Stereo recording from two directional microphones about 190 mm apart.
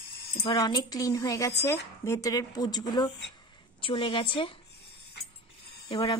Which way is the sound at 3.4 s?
25° left (ahead or behind).